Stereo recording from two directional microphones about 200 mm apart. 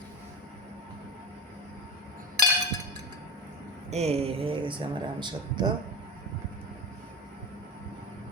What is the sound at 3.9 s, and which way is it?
Speech, 30° right (ahead or behind).